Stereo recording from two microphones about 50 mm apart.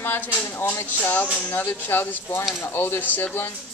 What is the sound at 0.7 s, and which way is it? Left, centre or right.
Speech, left.